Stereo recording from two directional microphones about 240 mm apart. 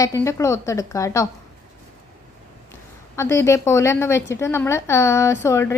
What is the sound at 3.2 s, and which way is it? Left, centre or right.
A woman's voice, centre.